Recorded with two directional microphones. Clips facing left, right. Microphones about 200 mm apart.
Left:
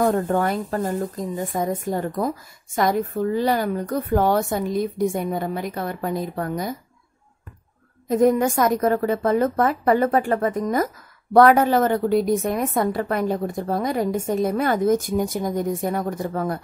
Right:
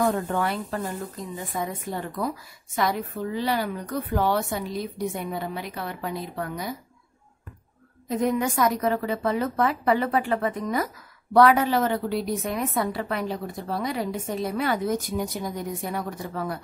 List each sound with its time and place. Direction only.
0.0 s speech: 45° left (ahead or behind)
8.1 s speech: 45° left (ahead or behind)